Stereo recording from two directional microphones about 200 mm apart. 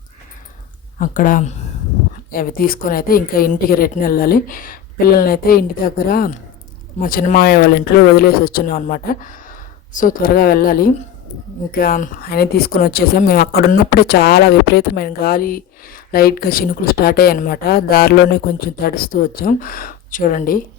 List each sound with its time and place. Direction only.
0.9 s a woman's voice: 40° left (ahead or behind)